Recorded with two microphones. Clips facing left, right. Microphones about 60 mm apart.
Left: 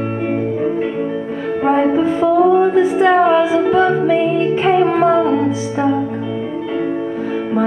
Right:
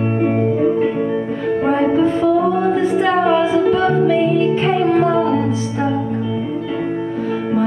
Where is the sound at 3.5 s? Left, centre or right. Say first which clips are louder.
Left 1 dB; left.